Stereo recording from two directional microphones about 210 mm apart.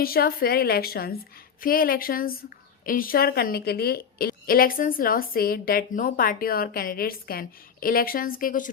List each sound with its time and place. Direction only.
0.0 s a woman's voice: 45° left (ahead or behind)